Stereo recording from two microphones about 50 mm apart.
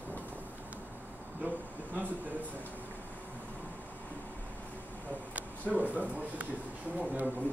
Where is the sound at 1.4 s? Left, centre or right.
Right.